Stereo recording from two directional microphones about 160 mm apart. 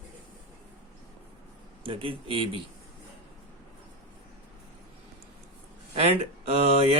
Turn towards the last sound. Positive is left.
turn(degrees=-40)  # may be behind; listen again after turning